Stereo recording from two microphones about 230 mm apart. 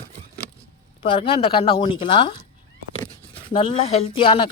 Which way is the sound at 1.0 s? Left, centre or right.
Left.